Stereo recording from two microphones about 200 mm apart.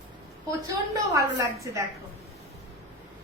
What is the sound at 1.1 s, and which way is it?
Speech, 15° right (ahead or behind).